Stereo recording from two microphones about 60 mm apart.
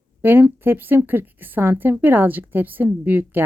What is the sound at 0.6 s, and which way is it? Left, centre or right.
A woman's voice, right.